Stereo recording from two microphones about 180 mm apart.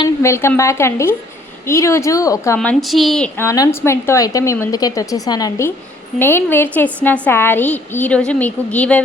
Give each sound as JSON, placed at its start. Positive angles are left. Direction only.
{"t": 0.0, "sound": "a woman's voice", "side_deg": 15}
{"t": 2.6, "sound": "a woman's voice", "side_deg": 0}
{"t": 3.3, "sound": "a woman's voice", "side_deg": 15}